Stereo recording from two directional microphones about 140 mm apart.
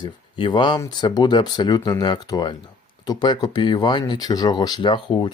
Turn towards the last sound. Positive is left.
turn(degrees=35)  # may be behind; listen again after turning